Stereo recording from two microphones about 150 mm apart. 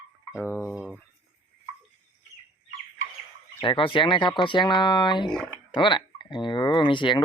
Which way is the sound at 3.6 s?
35° left (ahead or behind).